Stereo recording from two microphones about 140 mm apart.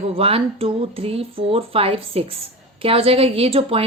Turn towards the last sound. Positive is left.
turn(degrees=-45)  # may be behind; listen again after turning